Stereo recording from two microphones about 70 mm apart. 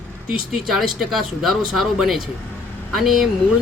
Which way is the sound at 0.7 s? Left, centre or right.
Centre.